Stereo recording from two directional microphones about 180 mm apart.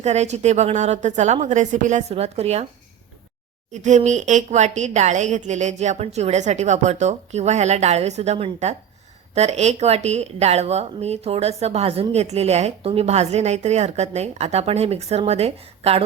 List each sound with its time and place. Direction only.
0.0 s a woman's voice: 40° right (ahead or behind)
3.7 s a woman's voice: 40° right (ahead or behind)